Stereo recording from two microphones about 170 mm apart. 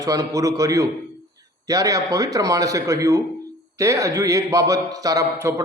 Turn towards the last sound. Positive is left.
turn(degrees=-15)  # may be behind; listen again after turning